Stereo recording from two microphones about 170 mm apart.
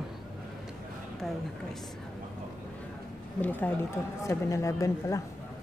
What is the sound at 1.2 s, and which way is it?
Speech, centre (ahead or behind).